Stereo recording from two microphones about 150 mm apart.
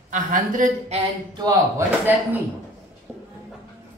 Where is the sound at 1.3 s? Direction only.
25° right (ahead or behind).